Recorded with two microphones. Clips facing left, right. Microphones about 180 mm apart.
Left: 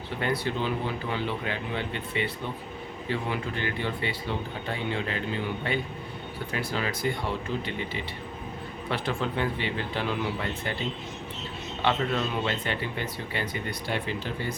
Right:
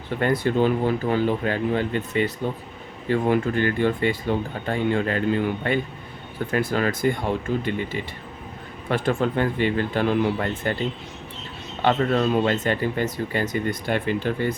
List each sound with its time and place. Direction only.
0.2 s speech: 50° right (ahead or behind)
8.9 s speech: 50° right (ahead or behind)
11.8 s speech: 45° right (ahead or behind)